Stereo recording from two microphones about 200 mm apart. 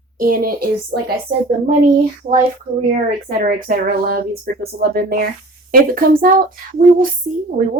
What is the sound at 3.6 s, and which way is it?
Speech, 50° right (ahead or behind).